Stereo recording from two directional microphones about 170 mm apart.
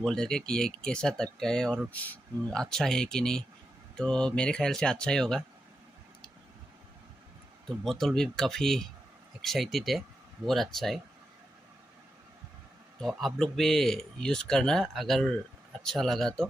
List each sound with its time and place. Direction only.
0.0 s speech: 5° left (ahead or behind)
7.6 s speech: centre (ahead or behind)
13.0 s speech: centre (ahead or behind)